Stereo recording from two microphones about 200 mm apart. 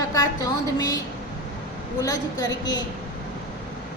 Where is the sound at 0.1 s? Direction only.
20° left (ahead or behind).